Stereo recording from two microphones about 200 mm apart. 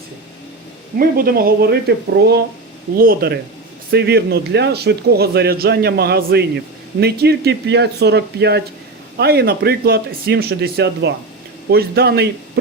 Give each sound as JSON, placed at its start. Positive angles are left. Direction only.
{"t": 0.9, "sound": "a man's voice", "side_deg": -50}